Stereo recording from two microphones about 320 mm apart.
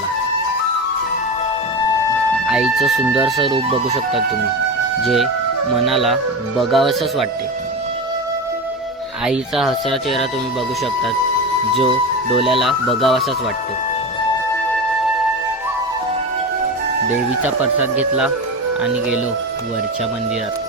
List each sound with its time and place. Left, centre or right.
2.5 s speech: centre
3.4 s speech: centre
5.0 s speech: centre
9.2 s speech: centre
12.5 s speech: centre